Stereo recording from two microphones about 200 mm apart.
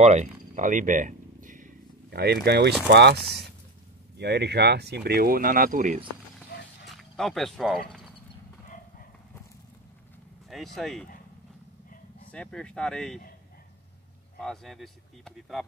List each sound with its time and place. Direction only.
0.0 s a sound: 35° right (ahead or behind); by 2.3 s 55° right (ahead or behind)
2.4 s speech: 55° right (ahead or behind)
6.9 s speech: centre (ahead or behind)
10.5 s speech: centre (ahead or behind)
12.3 s speech: 5° left (ahead or behind)
14.4 s speech: centre (ahead or behind)